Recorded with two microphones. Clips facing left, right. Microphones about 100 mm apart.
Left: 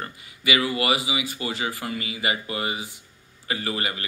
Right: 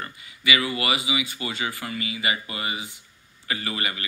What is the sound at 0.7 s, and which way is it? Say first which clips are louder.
A man's voice: left 2 dB; 40° left (ahead or behind).